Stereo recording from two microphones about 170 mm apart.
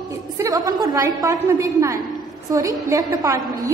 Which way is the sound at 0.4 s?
20° right (ahead or behind).